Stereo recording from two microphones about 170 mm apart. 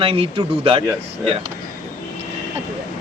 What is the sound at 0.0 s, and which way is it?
Speech, 35° right (ahead or behind).